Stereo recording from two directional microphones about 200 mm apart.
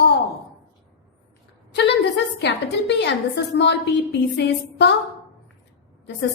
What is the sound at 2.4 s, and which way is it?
A woman's voice, 60° left (ahead or behind).